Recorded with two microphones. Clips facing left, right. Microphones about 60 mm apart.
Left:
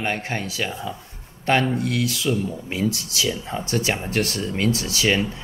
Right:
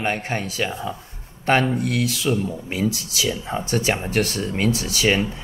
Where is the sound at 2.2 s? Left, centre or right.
Centre.